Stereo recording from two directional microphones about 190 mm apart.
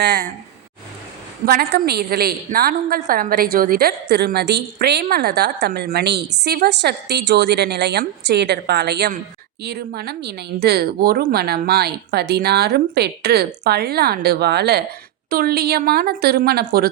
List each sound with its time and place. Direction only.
0.0 s speech: 55° right (ahead or behind)
1.5 s a woman's voice: 50° right (ahead or behind)